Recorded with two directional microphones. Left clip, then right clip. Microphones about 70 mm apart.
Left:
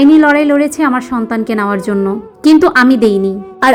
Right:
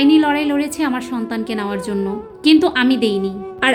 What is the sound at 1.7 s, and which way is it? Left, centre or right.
A woman's voice, left.